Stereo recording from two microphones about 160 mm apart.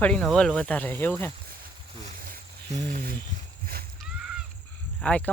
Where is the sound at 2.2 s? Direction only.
55° right (ahead or behind).